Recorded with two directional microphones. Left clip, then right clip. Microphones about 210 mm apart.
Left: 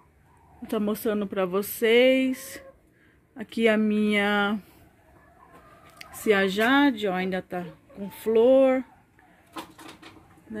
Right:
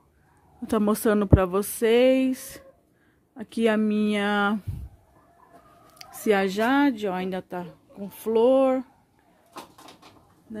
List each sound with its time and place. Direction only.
0.7 s a woman's voice: 25° right (ahead or behind)
1.4 s speech: 20° right (ahead or behind)
5.9 s speech: 20° right (ahead or behind)